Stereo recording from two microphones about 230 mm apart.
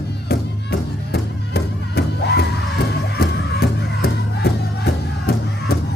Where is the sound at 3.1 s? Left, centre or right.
Left.